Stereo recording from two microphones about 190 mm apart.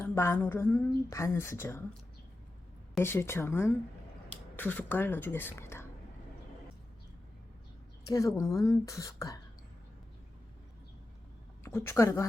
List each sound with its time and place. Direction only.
0.0 s a woman's voice: 15° left (ahead or behind)
3.0 s a woman's voice: 15° left (ahead or behind)
8.0 s a woman's voice: 20° left (ahead or behind)
11.6 s a woman's voice: 15° left (ahead or behind)